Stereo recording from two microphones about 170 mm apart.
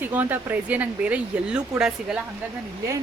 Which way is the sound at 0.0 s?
10° right (ahead or behind).